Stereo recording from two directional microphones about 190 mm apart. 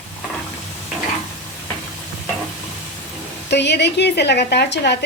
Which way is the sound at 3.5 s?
65° left (ahead or behind).